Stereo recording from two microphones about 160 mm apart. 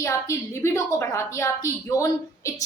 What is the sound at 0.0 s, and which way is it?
A woman's voice, 15° left (ahead or behind).